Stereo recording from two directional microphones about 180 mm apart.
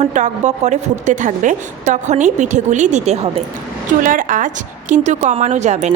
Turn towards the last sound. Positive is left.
turn(degrees=-40)  # may be behind; listen again after turning